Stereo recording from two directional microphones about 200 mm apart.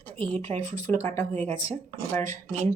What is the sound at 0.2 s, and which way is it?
Speech, 30° right (ahead or behind).